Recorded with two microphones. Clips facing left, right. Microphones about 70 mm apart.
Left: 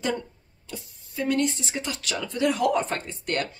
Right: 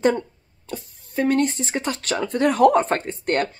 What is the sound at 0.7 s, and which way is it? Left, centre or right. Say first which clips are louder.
Speech: right 6 dB; right.